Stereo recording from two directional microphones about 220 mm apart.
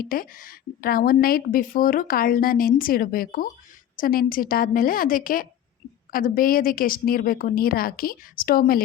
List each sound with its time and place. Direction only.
0.0 s a woman's voice: 40° left (ahead or behind)